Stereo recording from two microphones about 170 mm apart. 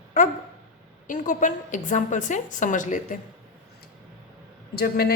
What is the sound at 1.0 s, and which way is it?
A woman's voice, 50° left (ahead or behind).